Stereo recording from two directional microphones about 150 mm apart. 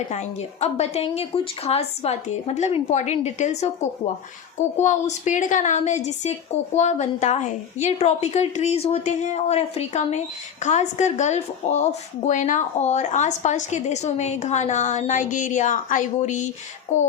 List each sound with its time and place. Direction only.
0.1 s a woman's voice: 50° left (ahead or behind)